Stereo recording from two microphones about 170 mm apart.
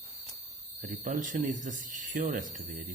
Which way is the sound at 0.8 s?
50° right (ahead or behind).